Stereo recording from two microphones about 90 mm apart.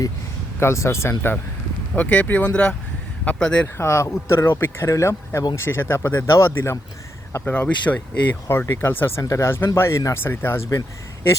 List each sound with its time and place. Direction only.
0.6 s speech: 30° left (ahead or behind)
2.0 s speech: 15° left (ahead or behind)
3.8 s speech: 30° left (ahead or behind)
8.4 s speech: 30° left (ahead or behind)